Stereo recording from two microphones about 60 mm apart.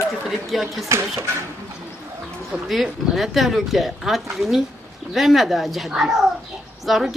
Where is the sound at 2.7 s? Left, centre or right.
Centre.